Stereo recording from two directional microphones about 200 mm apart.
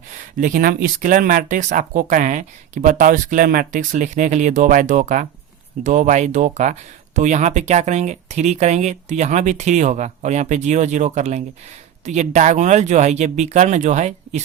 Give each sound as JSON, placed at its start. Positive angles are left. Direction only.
{"t": 0.3, "sound": "speech", "side_deg": -40}